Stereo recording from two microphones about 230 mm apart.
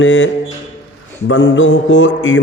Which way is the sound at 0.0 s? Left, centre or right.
Left.